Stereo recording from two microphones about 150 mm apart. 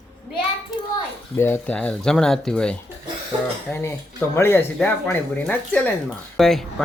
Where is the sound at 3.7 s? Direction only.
15° left (ahead or behind).